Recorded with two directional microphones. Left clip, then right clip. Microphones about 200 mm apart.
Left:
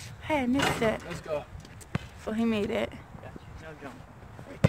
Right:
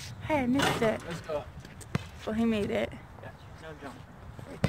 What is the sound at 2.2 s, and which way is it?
Speech, 10° left (ahead or behind).